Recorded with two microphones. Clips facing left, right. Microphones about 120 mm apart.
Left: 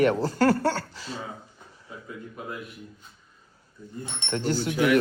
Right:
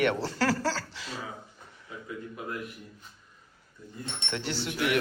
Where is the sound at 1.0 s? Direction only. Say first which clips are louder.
Left 3 dB; 30° left (ahead or behind).